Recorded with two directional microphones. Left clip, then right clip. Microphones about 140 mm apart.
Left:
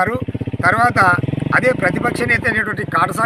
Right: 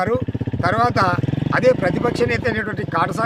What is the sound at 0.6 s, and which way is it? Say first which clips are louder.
Speech: left 4 dB; 45° right (ahead or behind).